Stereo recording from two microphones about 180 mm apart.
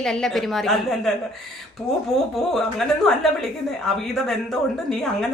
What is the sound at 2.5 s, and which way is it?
A woman's voice, centre (ahead or behind).